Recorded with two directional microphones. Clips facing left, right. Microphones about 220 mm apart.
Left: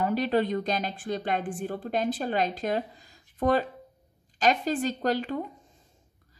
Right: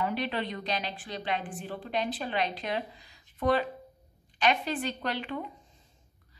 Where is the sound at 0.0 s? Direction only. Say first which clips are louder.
Left 6 dB; 45° left (ahead or behind).